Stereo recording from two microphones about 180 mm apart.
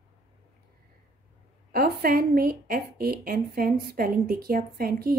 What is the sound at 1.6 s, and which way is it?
A woman's voice, 55° right (ahead or behind).